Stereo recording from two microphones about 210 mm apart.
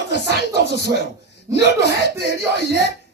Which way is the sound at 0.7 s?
50° right (ahead or behind).